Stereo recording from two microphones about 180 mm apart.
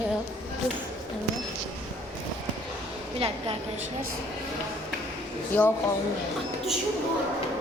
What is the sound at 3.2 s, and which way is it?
Speech, 30° right (ahead or behind).